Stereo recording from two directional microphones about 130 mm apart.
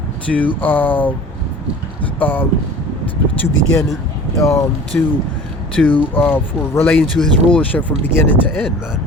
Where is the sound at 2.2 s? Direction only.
15° left (ahead or behind).